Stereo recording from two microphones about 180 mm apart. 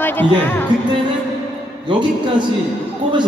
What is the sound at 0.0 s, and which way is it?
Speech, 10° left (ahead or behind).